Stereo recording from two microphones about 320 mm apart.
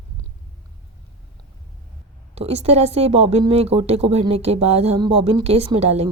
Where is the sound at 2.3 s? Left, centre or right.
Centre.